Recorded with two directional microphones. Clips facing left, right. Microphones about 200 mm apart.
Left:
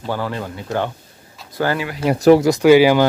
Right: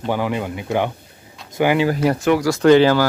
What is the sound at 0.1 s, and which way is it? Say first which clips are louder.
Speech: right 2 dB; 15° right (ahead or behind).